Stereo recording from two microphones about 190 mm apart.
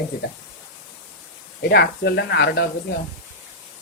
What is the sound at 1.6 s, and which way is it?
Speech, 60° left (ahead or behind).